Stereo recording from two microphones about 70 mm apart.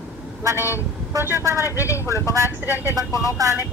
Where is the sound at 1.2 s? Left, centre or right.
Right.